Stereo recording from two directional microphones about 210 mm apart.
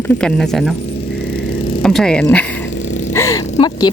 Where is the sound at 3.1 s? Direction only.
15° left (ahead or behind).